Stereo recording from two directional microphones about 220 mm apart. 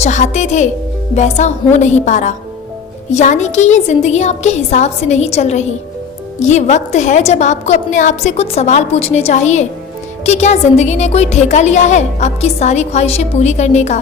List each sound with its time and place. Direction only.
0.0 s a woman's voice: 30° left (ahead or behind)